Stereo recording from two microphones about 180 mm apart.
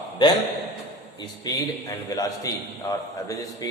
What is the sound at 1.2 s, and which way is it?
A man's voice, 20° left (ahead or behind).